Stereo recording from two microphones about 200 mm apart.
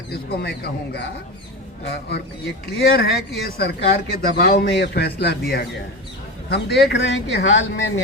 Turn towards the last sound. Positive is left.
turn(degrees=65)  # may be behind; listen again after turning